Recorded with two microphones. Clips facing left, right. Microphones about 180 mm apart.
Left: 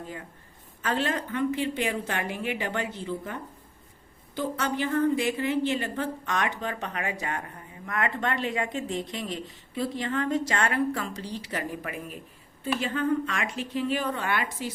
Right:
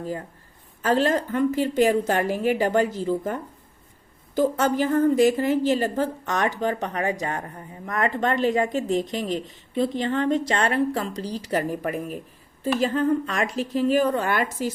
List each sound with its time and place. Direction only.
0.8 s a woman's voice: 40° right (ahead or behind)